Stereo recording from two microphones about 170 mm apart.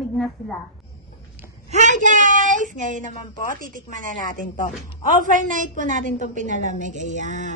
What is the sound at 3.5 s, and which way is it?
Speech, 50° right (ahead or behind).